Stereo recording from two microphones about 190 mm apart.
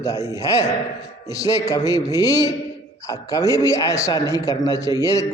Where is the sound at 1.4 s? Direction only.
20° left (ahead or behind).